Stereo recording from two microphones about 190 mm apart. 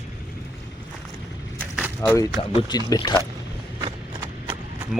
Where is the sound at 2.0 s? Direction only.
10° left (ahead or behind).